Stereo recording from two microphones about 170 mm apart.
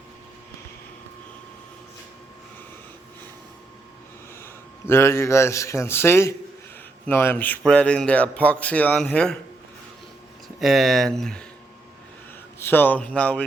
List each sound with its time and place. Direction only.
4.9 s speech: 15° left (ahead or behind)
10.6 s speech: centre (ahead or behind)
12.5 s speech: 15° left (ahead or behind)